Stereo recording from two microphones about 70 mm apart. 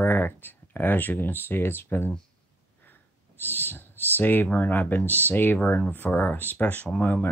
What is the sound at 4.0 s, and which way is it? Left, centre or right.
Speech, left.